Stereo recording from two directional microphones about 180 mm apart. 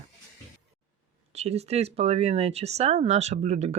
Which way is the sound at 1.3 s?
35° right (ahead or behind).